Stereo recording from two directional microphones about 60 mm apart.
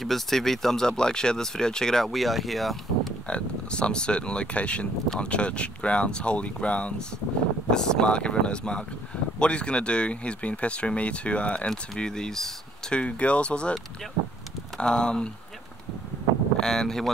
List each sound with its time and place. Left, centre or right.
0.0 s speech: centre
3.3 s speech: centre
11.7 s speech: centre
12.9 s speech: left
14.8 s speech: centre
16.5 s speech: centre